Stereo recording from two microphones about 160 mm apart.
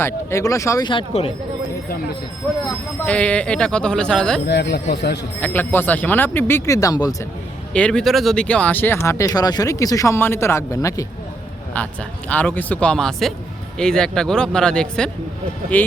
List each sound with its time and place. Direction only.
0.0 s speech: 20° left (ahead or behind)
0.9 s speech: 35° left (ahead or behind)
3.1 s speech: 5° left (ahead or behind)
4.4 s speech: 90° left
5.4 s speech: 10° left (ahead or behind)
7.7 s speech: 5° left (ahead or behind)
12.3 s speech: 10° left (ahead or behind)